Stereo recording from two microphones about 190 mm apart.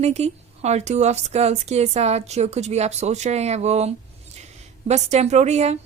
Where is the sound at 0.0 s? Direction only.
35° right (ahead or behind).